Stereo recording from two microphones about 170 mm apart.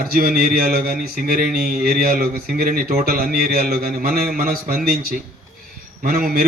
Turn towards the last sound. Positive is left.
turn(degrees=-60)  # may be behind; listen again after turning